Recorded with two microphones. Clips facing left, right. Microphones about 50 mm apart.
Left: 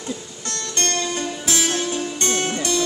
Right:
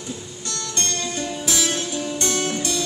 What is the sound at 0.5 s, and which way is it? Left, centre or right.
Music, left.